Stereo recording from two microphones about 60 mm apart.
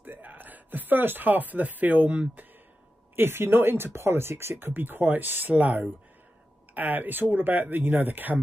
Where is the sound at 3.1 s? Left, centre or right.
Right.